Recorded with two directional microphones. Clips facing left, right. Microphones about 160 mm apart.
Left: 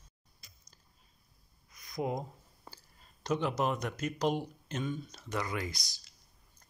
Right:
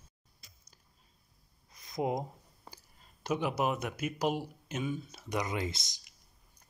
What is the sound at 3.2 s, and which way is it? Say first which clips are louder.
Speech: even; 10° right (ahead or behind).